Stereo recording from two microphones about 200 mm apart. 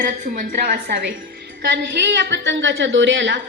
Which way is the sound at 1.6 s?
60° right (ahead or behind).